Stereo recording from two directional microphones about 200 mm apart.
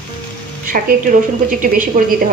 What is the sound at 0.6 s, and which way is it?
A woman's voice, 45° right (ahead or behind).